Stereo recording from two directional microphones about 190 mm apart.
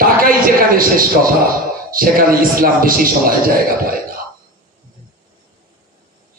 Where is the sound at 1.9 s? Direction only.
50° right (ahead or behind).